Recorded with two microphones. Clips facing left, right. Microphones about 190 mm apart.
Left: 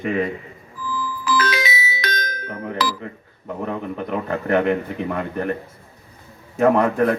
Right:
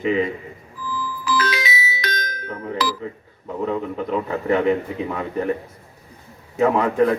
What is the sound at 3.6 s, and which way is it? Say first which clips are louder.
A man's voice: right 3 dB; 60° left (ahead or behind).